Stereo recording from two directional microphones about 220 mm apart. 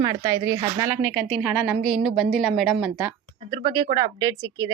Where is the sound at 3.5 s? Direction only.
20° right (ahead or behind).